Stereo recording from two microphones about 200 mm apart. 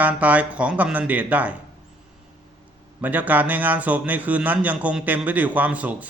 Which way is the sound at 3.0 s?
10° right (ahead or behind).